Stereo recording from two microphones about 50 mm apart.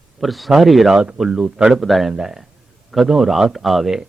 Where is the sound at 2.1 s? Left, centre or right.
Centre.